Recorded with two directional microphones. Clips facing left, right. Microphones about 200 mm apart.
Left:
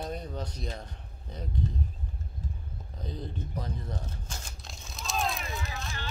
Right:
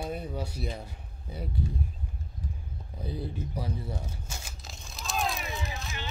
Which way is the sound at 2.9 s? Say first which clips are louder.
Right 3 dB; 10° right (ahead or behind).